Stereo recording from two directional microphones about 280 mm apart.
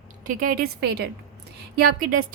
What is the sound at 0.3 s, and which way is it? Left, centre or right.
A woman's voice, right.